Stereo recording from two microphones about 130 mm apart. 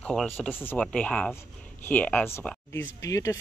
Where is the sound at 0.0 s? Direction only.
5° left (ahead or behind).